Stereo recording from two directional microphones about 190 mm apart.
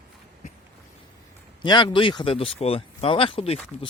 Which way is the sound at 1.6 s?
25° left (ahead or behind).